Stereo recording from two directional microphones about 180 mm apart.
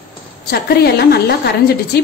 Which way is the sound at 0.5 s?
65° left (ahead or behind).